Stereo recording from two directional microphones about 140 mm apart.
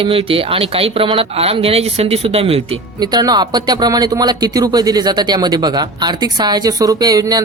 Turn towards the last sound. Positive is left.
turn(degrees=-25)  # may be behind; listen again after turning